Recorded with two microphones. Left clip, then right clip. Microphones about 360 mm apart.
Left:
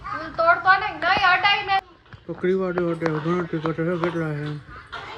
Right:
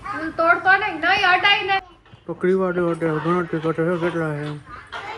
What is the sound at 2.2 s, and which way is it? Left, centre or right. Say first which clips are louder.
A man's voice: right 3 dB; right.